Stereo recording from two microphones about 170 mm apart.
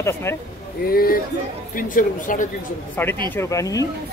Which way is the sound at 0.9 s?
60° left (ahead or behind).